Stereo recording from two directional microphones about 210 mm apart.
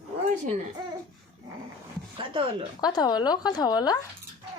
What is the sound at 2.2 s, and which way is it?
Speech, 25° right (ahead or behind).